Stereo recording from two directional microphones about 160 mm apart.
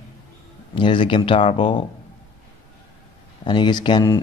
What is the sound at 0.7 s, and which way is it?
Speech, 30° left (ahead or behind).